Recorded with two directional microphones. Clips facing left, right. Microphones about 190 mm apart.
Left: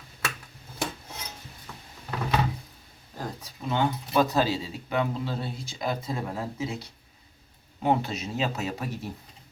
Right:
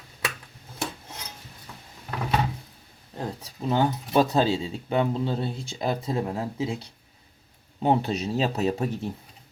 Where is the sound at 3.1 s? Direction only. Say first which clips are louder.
Right 3 dB; 30° right (ahead or behind).